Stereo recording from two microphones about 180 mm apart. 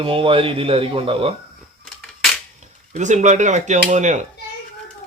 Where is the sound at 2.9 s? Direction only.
40° right (ahead or behind).